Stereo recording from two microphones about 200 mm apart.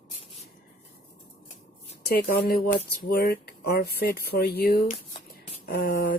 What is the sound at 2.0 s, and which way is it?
Speech, 50° left (ahead or behind).